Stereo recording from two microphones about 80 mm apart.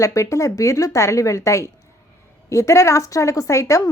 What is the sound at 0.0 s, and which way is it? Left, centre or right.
A woman's voice, left.